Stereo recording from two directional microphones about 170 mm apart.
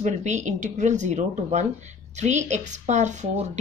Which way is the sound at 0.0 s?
45° right (ahead or behind).